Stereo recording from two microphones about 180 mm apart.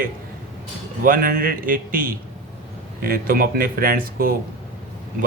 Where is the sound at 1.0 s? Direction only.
55° right (ahead or behind).